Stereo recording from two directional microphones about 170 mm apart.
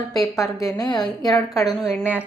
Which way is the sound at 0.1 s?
20° left (ahead or behind).